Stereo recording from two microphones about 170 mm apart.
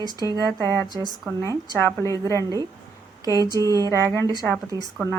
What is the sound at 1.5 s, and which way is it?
Speech, 15° left (ahead or behind).